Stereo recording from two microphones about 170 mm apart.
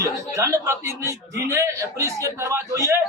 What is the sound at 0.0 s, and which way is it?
A man's voice, 20° right (ahead or behind).